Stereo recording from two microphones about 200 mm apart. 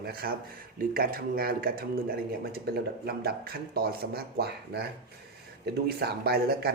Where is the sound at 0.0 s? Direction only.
50° right (ahead or behind).